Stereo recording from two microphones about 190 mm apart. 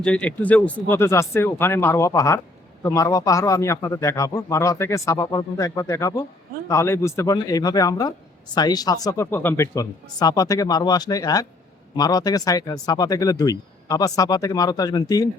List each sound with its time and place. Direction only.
0.0 s a man's voice: 5° left (ahead or behind)